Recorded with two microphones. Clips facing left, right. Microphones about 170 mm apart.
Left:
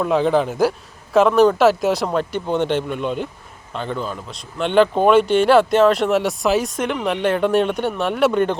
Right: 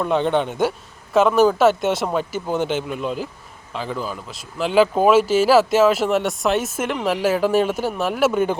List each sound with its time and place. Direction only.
0.0 s speech: centre (ahead or behind)